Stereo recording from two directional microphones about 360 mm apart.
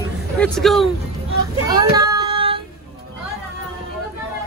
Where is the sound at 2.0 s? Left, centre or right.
Centre.